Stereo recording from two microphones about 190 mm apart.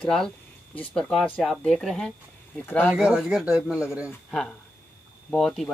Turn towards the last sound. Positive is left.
turn(degrees=0)  # may be behind; listen again after turning